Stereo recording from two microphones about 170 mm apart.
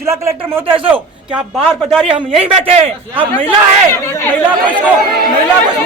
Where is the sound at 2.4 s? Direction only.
35° right (ahead or behind).